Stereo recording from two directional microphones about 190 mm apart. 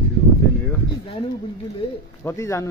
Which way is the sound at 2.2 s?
15° left (ahead or behind).